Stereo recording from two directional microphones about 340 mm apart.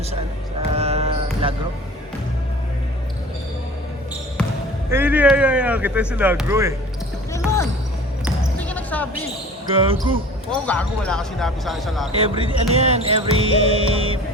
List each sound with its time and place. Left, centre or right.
0.7 s basketball bounce: centre
4.9 s speech: centre
7.3 s basketball bounce: centre
9.7 s speech: centre
10.5 s speech: centre
12.1 s speech: centre